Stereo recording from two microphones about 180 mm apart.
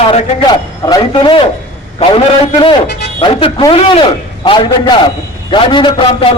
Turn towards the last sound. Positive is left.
turn(degrees=25)  # may be behind; listen again after turning